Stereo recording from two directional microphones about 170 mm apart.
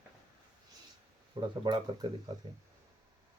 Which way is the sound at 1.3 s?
25° right (ahead or behind).